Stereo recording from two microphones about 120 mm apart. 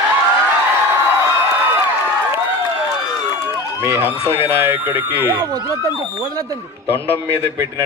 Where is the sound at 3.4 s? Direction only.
20° right (ahead or behind).